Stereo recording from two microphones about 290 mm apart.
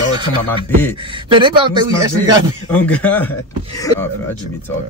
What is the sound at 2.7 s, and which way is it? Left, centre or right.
A man's voice, centre.